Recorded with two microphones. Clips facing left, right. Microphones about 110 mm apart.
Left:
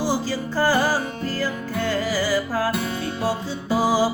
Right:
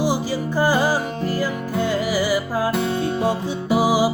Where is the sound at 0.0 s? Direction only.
15° right (ahead or behind).